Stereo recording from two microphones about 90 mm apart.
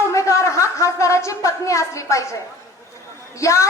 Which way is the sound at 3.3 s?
35° left (ahead or behind).